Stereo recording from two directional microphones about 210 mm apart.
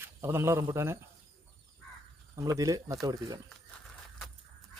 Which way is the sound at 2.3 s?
15° right (ahead or behind).